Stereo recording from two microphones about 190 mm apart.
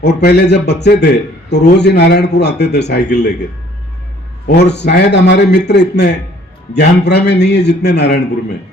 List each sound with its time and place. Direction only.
0.0 s a man's voice: 60° left (ahead or behind)
4.4 s a man's voice: 65° left (ahead or behind)